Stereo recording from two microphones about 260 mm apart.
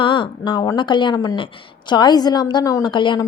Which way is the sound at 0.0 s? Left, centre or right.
Centre.